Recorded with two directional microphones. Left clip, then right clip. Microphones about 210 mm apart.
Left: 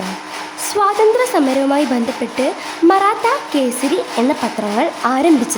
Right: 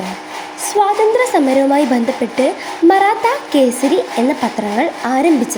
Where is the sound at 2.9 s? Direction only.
5° right (ahead or behind).